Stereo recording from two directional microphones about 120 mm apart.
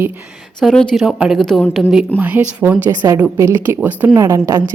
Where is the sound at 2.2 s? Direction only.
15° right (ahead or behind).